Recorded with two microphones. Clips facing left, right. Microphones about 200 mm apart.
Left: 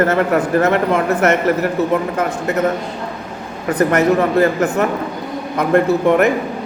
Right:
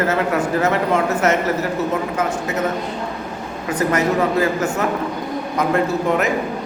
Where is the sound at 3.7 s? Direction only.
60° left (ahead or behind).